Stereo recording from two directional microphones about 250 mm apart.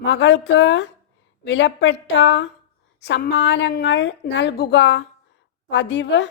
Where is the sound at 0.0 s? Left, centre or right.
Left.